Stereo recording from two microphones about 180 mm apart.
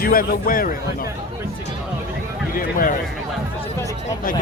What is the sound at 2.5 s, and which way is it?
Speech, 50° left (ahead or behind).